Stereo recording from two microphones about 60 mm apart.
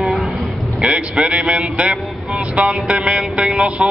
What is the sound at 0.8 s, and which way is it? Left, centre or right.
Speech, centre.